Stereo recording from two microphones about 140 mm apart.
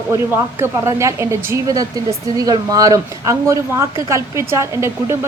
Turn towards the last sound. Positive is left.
turn(degrees=-20)  # may be behind; listen again after turning